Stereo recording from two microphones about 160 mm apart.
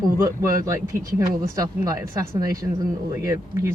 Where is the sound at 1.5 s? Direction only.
20° right (ahead or behind).